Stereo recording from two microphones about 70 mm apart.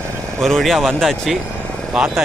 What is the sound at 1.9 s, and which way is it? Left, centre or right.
Speech, centre.